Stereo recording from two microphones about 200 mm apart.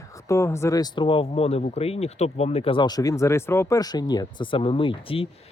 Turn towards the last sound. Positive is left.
turn(degrees=25)  # may be behind; listen again after turning